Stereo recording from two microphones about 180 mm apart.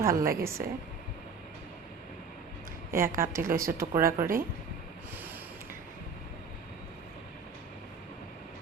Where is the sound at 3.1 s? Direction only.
50° right (ahead or behind).